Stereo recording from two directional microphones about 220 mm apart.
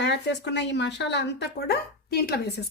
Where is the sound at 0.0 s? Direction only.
50° left (ahead or behind).